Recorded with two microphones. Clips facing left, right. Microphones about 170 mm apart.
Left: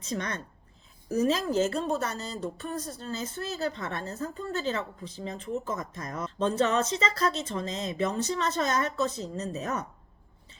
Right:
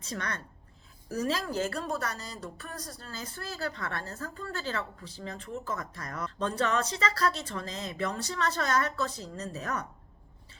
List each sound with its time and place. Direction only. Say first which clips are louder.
0.0 s a woman's voice: left 4 dB; 20° left (ahead or behind)